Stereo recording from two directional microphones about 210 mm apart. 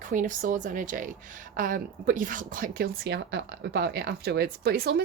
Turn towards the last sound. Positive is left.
turn(degrees=-50)  # may be behind; listen again after turning